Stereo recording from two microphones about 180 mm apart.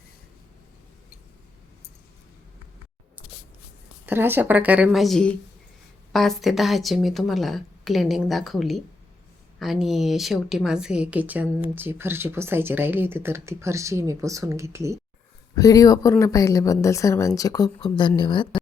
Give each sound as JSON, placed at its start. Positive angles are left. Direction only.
{"t": 4.0, "sound": "speech", "side_deg": -10}
{"t": 15.5, "sound": "a woman's voice", "side_deg": 20}